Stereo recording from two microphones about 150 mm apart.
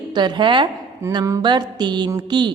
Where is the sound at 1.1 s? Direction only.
25° right (ahead or behind).